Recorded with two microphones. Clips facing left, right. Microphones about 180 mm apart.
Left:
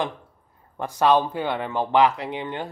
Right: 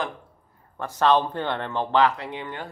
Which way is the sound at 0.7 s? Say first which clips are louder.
Left 1 dB; 15° left (ahead or behind).